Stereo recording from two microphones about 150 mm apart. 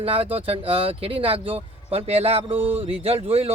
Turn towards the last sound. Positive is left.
turn(degrees=-40)  # may be behind; listen again after turning